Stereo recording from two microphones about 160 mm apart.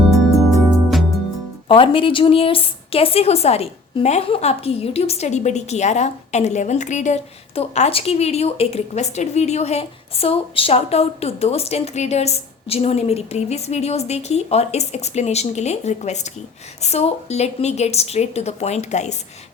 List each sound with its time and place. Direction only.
0.7 s music: centre (ahead or behind)
1.6 s a woman's voice: 35° left (ahead or behind)